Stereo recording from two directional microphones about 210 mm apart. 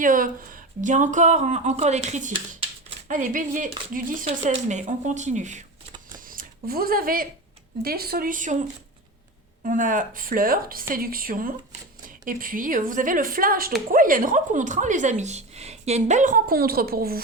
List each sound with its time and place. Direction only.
0.0 s speech: 40° right (ahead or behind)
6.1 s zipper: 40° right (ahead or behind)
7.8 s speech: 45° right (ahead or behind)